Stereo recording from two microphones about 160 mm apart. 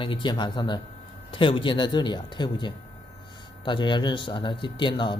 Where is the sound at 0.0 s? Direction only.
30° left (ahead or behind).